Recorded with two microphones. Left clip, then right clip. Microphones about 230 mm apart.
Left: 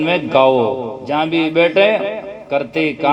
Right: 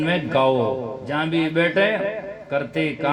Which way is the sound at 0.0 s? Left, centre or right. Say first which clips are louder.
Left 7 dB; left.